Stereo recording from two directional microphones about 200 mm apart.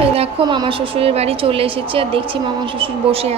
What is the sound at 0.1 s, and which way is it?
A woman's voice, 25° right (ahead or behind).